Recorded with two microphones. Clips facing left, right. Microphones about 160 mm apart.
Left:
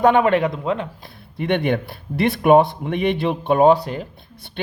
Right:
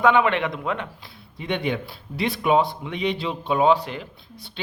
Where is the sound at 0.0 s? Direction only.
45° left (ahead or behind).